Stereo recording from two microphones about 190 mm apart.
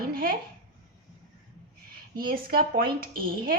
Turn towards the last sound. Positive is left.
turn(degrees=-50)  # may be behind; listen again after turning